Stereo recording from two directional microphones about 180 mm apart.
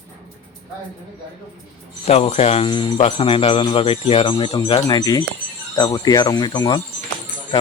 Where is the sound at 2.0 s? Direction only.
35° left (ahead or behind).